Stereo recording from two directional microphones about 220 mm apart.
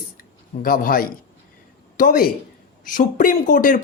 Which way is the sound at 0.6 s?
40° left (ahead or behind).